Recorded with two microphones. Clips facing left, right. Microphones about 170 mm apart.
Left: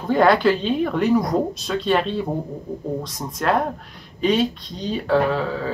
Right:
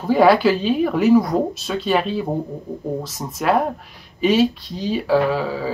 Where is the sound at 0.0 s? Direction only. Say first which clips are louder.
Right 2 dB; 5° right (ahead or behind).